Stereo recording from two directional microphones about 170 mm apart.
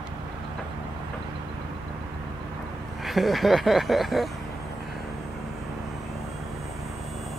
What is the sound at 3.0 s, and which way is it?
Vehicle, centre (ahead or behind).